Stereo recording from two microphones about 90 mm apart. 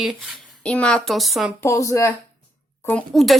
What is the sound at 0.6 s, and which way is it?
Speech, 10° left (ahead or behind).